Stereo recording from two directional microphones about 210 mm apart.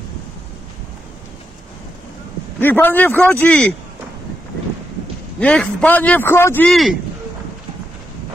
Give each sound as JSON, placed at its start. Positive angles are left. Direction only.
{"t": 2.6, "sound": "speech", "side_deg": 10}
{"t": 5.4, "sound": "speech", "side_deg": 5}